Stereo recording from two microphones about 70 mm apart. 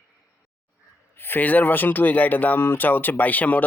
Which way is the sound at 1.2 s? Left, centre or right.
Left.